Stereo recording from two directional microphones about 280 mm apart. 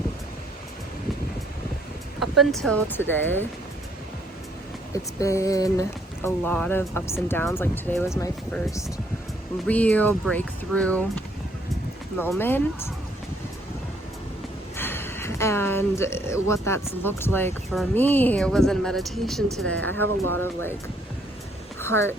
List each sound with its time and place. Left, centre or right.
2.1 s speech: centre
5.2 s speech: centre
9.6 s speech: centre
14.8 s speech: centre
20.1 s speech: right
21.8 s a sound: centre